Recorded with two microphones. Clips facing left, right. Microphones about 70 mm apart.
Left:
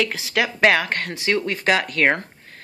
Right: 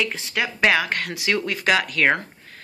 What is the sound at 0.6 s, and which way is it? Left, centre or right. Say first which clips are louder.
Speech: left 1 dB; left.